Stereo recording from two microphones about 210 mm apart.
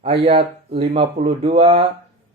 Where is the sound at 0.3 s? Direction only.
25° right (ahead or behind).